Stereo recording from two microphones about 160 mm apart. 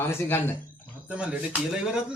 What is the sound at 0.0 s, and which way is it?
Speech, 15° left (ahead or behind).